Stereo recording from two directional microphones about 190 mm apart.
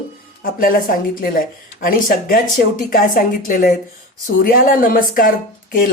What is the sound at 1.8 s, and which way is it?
Speech, 50° left (ahead or behind).